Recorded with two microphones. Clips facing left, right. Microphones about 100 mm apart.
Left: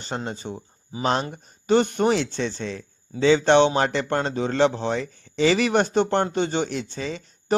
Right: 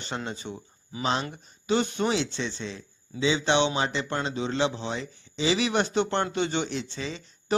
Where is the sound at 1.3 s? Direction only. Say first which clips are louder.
Left 6 dB; 50° left (ahead or behind).